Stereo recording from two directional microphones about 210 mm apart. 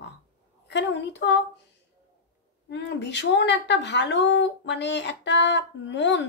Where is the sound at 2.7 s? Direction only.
55° left (ahead or behind).